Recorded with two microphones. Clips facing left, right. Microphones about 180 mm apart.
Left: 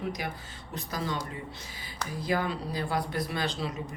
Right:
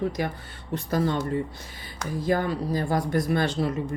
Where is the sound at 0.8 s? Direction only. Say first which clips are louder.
Right 8 dB; 55° right (ahead or behind).